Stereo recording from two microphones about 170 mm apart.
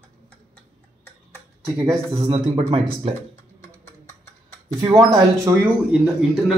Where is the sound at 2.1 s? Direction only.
30° right (ahead or behind).